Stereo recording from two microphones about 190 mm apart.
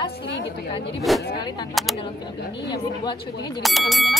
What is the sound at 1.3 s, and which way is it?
Speech, 25° left (ahead or behind).